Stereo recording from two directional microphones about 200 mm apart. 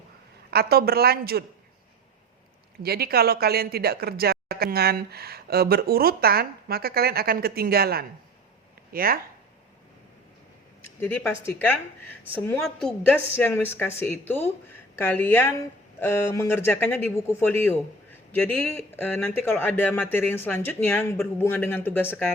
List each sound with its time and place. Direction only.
0.5 s speech: 50° right (ahead or behind)
2.8 s speech: 50° right (ahead or behind)
10.8 s a man's voice: 10° left (ahead or behind)